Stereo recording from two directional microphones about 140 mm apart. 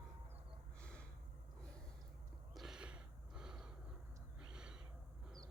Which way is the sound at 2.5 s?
5° right (ahead or behind).